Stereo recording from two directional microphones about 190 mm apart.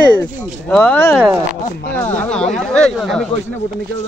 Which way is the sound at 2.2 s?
5° left (ahead or behind).